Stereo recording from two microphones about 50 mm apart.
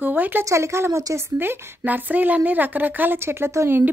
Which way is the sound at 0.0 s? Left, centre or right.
Right.